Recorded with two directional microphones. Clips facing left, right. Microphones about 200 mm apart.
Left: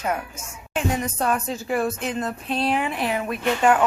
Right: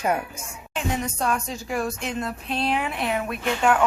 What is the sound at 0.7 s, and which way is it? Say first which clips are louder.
Speech: left 3 dB; 5° left (ahead or behind).